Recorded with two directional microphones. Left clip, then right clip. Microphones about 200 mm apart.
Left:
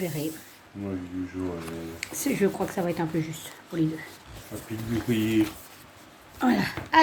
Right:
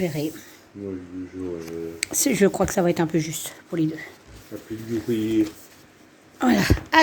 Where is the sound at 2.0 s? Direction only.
50° right (ahead or behind).